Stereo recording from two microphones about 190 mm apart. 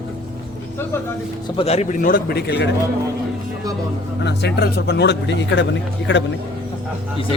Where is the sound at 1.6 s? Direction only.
35° left (ahead or behind); by 2.7 s 60° left (ahead or behind).